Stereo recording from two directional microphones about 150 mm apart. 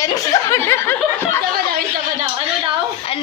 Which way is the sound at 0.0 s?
20° left (ahead or behind).